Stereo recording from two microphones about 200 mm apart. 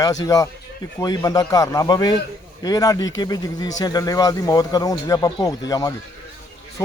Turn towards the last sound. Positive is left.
turn(degrees=15)  # may be behind; listen again after turning